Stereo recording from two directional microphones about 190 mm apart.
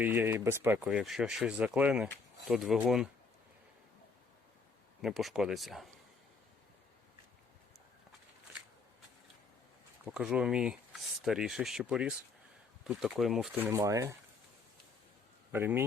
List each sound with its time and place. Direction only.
0.0 s speech: 10° right (ahead or behind)
5.0 s speech: centre (ahead or behind)
10.1 s speech: 5° right (ahead or behind)
13.7 s speech: 15° right (ahead or behind)
15.5 s speech: 10° right (ahead or behind)